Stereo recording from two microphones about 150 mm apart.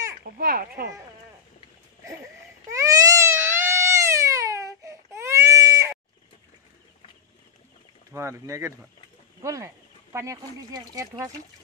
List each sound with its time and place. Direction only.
0.4 s a child's voice: 75° right (ahead or behind)
2.7 s baby cry: 20° right (ahead or behind)
8.1 s speech: 20° right (ahead or behind)